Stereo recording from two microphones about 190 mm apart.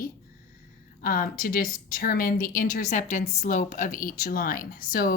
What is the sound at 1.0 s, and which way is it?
A woman's voice, 50° left (ahead or behind).